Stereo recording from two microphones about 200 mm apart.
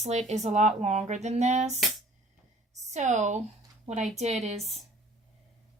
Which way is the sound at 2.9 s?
35° right (ahead or behind).